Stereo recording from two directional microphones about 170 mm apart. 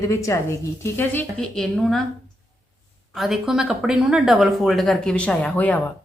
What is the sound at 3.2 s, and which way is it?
Speech, centre (ahead or behind).